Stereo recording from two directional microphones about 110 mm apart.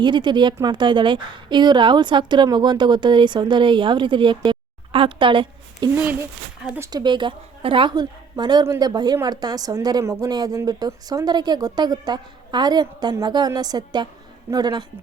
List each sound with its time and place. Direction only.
0.0 s a woman's voice: 45° right (ahead or behind)
6.9 s a woman's voice: 45° right (ahead or behind)